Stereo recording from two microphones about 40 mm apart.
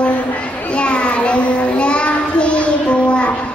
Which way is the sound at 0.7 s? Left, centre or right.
Left.